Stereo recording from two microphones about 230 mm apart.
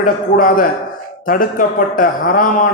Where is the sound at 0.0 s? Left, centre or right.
Left.